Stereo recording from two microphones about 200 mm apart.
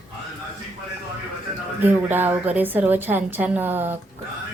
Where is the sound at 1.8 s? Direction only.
10° right (ahead or behind).